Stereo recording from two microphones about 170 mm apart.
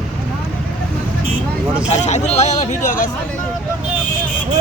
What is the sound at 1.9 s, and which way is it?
Speech, 40° left (ahead or behind).